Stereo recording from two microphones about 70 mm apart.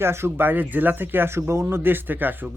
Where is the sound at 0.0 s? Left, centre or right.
Right.